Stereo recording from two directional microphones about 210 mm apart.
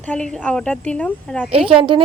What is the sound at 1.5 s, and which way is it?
Speech, 25° right (ahead or behind).